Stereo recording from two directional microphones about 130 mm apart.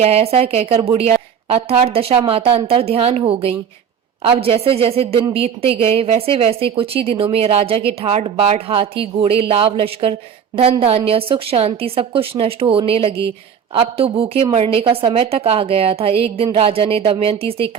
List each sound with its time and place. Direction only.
0.0 s a woman's voice: 50° right (ahead or behind)